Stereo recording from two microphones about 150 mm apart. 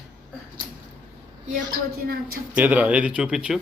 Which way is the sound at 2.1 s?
85° right.